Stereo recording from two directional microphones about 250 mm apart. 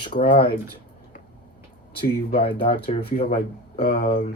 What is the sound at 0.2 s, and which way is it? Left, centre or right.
Speech, left.